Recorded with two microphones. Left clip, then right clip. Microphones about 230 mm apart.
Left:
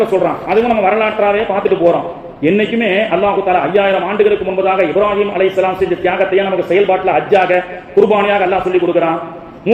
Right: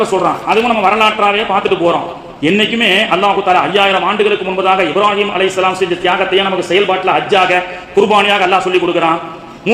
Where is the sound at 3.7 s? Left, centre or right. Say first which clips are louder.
Right 1 dB; centre.